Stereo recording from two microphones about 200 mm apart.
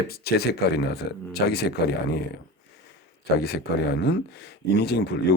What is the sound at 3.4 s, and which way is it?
Speech, 55° left (ahead or behind).